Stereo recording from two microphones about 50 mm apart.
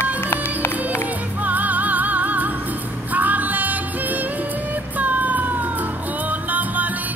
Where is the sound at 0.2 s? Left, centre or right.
Left.